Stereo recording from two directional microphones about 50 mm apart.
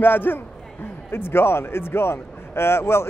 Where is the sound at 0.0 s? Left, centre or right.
Left.